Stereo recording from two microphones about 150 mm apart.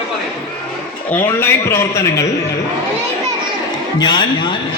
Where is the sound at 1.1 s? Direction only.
15° left (ahead or behind).